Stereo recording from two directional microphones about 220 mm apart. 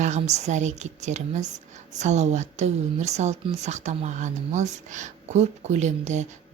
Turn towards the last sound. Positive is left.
turn(degrees=-30)  # may be behind; listen again after turning